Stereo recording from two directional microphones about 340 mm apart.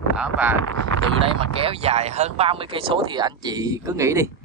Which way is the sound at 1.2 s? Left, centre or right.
Centre.